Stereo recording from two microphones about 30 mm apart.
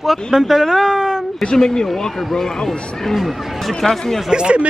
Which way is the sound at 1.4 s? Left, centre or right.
Left.